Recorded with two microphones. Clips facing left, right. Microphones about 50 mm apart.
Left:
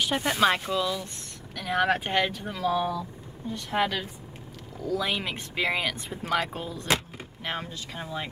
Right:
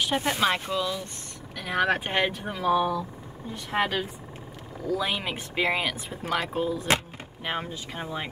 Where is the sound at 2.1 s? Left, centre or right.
Centre.